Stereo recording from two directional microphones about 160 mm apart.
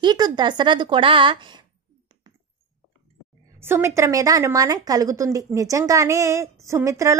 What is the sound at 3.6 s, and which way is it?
A woman's voice, 15° right (ahead or behind).